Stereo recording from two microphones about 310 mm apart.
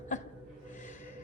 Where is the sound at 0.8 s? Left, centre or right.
Left.